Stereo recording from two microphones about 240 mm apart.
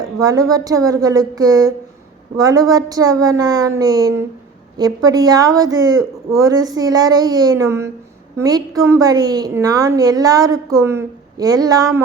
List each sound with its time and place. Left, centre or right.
0.2 s a woman's voice: centre